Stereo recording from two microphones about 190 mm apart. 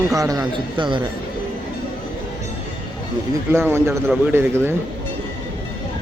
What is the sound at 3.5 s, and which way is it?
Speech, 10° right (ahead or behind).